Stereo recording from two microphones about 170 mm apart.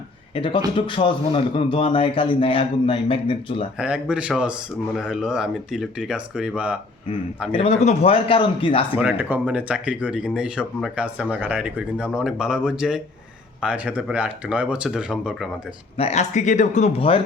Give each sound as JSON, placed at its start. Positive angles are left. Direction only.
{"t": 0.3, "sound": "a man's voice", "side_deg": 30}
{"t": 3.8, "sound": "speech", "side_deg": -5}
{"t": 7.5, "sound": "a man's voice", "side_deg": 35}
{"t": 9.0, "sound": "speech", "side_deg": -10}
{"t": 16.0, "sound": "a man's voice", "side_deg": 40}